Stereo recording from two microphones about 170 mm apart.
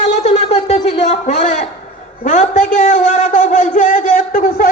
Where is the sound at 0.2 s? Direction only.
40° left (ahead or behind).